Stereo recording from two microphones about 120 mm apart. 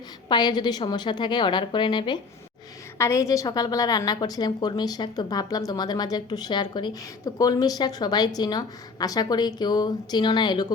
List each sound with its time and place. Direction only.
0.3 s a woman's voice: 35° left (ahead or behind)
3.0 s a woman's voice: 25° left (ahead or behind)